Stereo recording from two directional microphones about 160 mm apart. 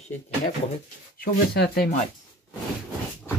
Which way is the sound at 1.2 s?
70° left (ahead or behind).